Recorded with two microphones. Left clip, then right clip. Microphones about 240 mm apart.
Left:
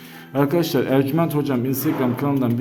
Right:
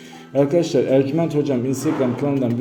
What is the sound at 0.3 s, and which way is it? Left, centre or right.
A man's voice, centre.